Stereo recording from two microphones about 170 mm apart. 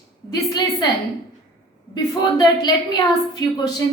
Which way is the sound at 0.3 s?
25° left (ahead or behind).